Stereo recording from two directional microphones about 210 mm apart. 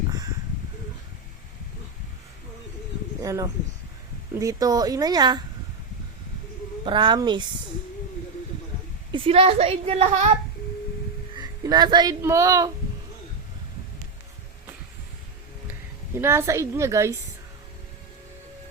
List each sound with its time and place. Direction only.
3.2 s a sound: 15° right (ahead or behind)
4.4 s a woman's voice: 15° right (ahead or behind)
6.8 s a woman's voice: 20° right (ahead or behind)
9.1 s a woman's voice: 25° right (ahead or behind)
11.3 s speech: 20° right (ahead or behind)
16.1 s a woman's voice: 10° right (ahead or behind)